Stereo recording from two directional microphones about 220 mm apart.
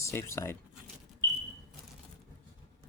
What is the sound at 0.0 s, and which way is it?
Speech, 10° left (ahead or behind).